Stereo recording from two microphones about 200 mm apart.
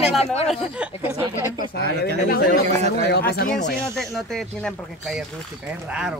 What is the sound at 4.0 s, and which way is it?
Speech, centre (ahead or behind).